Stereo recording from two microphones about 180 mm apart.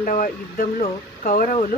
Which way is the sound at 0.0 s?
45° left (ahead or behind).